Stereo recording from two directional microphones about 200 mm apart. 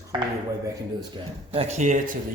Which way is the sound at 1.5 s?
30° right (ahead or behind).